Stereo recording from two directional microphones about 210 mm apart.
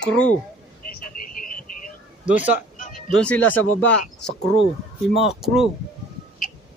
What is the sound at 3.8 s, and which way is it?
Speech, 60° left (ahead or behind).